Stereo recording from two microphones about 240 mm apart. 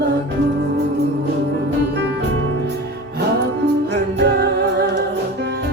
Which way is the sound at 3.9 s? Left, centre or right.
Right.